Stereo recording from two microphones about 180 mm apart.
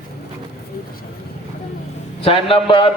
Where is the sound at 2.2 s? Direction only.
30° left (ahead or behind).